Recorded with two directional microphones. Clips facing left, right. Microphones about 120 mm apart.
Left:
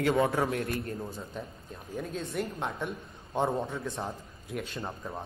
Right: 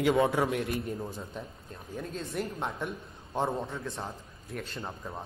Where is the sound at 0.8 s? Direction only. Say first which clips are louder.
Right 1 dB; centre (ahead or behind).